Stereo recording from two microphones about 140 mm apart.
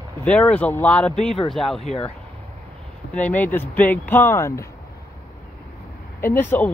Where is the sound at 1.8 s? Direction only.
45° left (ahead or behind).